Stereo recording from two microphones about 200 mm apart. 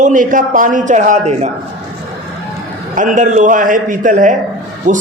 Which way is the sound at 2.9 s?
40° right (ahead or behind).